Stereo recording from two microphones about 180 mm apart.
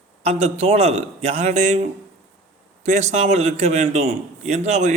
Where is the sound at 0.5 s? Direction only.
35° right (ahead or behind).